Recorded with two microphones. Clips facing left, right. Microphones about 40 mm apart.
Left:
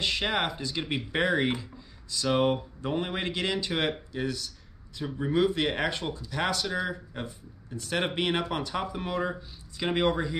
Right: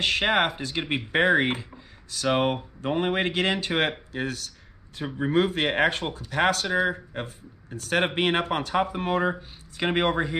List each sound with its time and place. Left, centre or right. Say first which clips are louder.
0.0 s speech: right 5 dB; right
7.2 s speech: right 1 dB; right
8.0 s speech: right 4 dB; right